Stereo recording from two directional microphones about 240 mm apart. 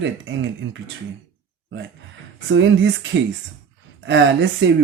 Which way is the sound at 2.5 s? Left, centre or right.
Right.